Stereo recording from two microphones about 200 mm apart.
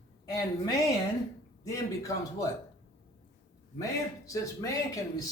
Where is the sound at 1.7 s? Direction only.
15° left (ahead or behind).